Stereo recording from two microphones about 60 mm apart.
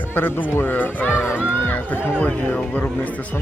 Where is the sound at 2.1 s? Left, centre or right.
Left.